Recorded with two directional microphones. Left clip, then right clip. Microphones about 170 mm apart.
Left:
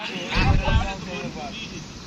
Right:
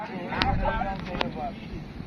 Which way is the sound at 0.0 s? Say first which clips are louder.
Left 3 dB; 20° left (ahead or behind).